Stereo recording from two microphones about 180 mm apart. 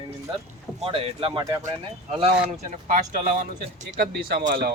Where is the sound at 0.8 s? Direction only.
30° right (ahead or behind).